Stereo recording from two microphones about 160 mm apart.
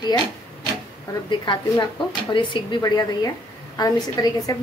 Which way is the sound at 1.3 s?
30° left (ahead or behind).